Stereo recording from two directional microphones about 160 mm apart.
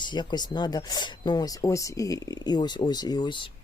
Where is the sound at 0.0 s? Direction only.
30° left (ahead or behind).